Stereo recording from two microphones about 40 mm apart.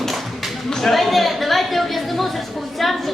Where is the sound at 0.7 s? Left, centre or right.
Centre.